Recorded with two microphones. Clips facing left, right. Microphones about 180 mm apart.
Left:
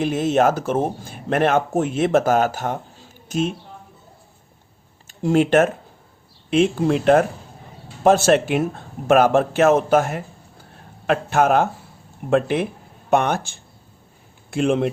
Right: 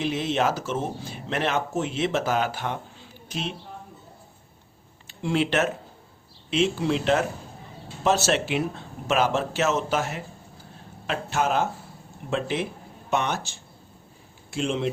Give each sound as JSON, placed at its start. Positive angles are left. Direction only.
{"t": 0.0, "sound": "speech", "side_deg": 50}
{"t": 5.0, "sound": "speech", "side_deg": 45}